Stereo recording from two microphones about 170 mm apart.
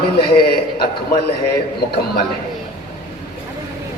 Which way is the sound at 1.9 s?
65° left (ahead or behind).